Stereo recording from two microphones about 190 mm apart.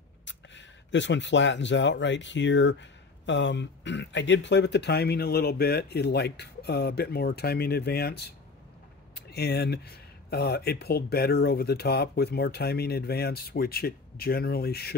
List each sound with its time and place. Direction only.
0.2 s speech: 70° left (ahead or behind); by 15.0 s 55° left (ahead or behind)